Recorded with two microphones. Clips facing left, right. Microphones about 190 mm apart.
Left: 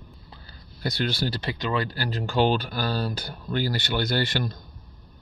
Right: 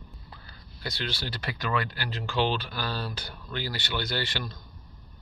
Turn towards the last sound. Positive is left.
turn(degrees=45)  # may be behind; listen again after turning